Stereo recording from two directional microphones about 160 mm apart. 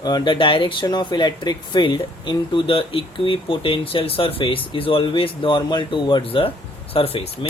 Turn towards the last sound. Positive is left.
turn(degrees=35)  # may be behind; listen again after turning